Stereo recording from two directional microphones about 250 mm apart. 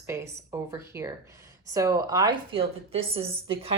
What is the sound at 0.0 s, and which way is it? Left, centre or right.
Speech, centre.